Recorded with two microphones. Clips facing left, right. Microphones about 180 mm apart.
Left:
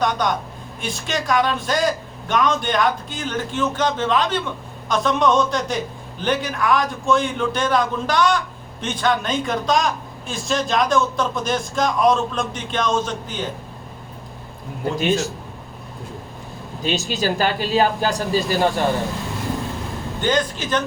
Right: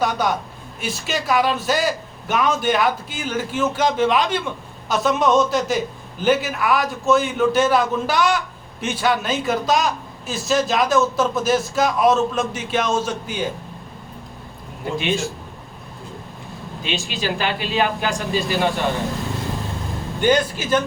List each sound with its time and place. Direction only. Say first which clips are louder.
0.0 s a man's voice: even; 5° right (ahead or behind)
14.9 s speech: left 2 dB; 40° left (ahead or behind)
16.8 s speech: left 3 dB; 40° left (ahead or behind)
20.2 s a man's voice: right 3 dB; 10° right (ahead or behind)